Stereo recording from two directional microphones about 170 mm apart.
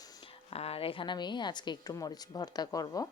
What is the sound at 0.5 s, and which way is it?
A woman's voice, 35° left (ahead or behind).